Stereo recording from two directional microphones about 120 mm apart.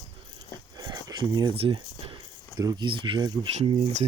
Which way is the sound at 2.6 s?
35° right (ahead or behind).